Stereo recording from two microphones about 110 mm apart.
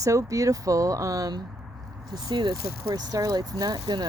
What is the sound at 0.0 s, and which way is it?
Speech, 30° right (ahead or behind).